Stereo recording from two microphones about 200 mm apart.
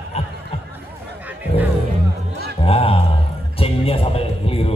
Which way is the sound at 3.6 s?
30° left (ahead or behind).